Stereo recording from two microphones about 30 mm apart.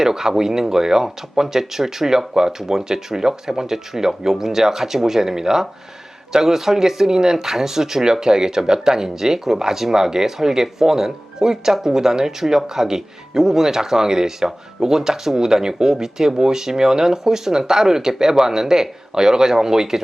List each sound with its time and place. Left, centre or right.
0.0 s speech: centre